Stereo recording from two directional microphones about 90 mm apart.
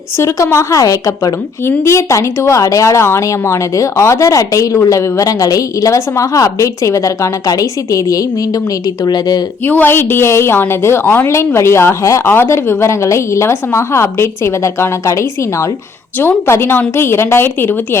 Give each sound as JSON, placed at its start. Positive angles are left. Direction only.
{"t": 0.2, "sound": "speech", "side_deg": 35}
{"t": 9.0, "sound": "speech", "side_deg": 50}
{"t": 9.6, "sound": "a woman's voice", "side_deg": 20}